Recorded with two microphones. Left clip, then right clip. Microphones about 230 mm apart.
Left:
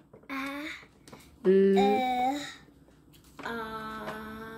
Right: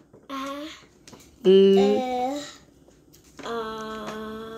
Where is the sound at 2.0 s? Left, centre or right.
Centre.